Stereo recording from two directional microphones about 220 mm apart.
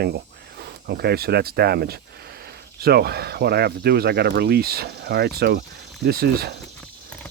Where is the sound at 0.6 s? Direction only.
45° right (ahead or behind).